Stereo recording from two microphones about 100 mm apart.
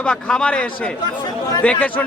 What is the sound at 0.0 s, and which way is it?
A man's voice, 10° left (ahead or behind).